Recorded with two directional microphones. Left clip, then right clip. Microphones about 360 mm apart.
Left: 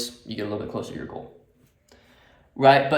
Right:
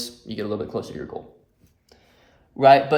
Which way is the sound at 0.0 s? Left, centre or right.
Centre.